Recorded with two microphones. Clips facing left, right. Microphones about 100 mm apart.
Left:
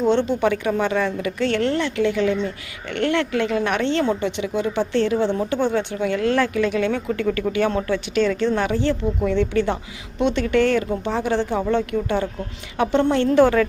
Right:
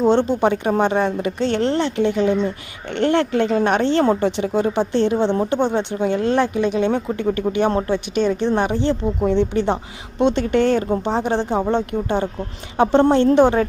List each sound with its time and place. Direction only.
0.0 s a woman's voice: 35° right (ahead or behind)